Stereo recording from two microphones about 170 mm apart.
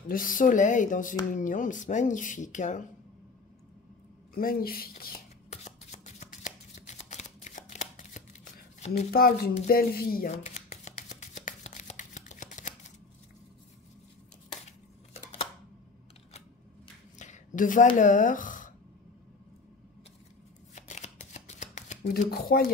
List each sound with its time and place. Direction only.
0.1 s speech: 50° left (ahead or behind)
4.3 s speech: 55° left (ahead or behind)
5.5 s shuffling cards: 40° left (ahead or behind)
8.7 s a sound: 40° left (ahead or behind)
9.1 s speech: 60° left (ahead or behind)
10.3 s shuffling cards: 40° left (ahead or behind)
17.2 s a sound: 45° left (ahead or behind)
17.9 s speech: 50° left (ahead or behind)
20.7 s shuffling cards: 45° left (ahead or behind)
22.3 s speech: 65° left (ahead or behind)